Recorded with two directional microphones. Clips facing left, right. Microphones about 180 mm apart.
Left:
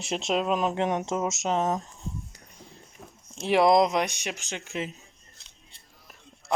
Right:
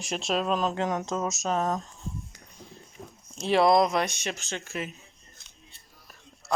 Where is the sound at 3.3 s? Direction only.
20° left (ahead or behind).